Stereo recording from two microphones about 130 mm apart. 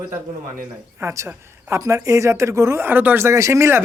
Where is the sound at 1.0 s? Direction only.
20° right (ahead or behind).